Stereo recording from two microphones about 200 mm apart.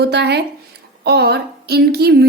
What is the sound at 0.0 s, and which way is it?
Speech, 55° right (ahead or behind).